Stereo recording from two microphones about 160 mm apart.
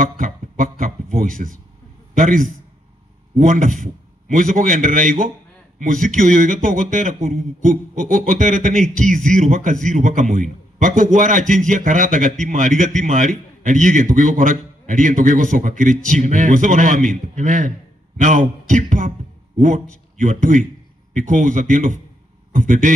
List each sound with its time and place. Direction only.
0.0 s a sound: 55° right (ahead or behind)
1.1 s a man's voice: 55° right (ahead or behind)
20.2 s a man's voice: 50° right (ahead or behind)